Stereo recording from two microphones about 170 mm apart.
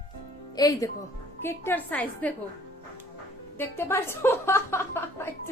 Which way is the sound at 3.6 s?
15° left (ahead or behind).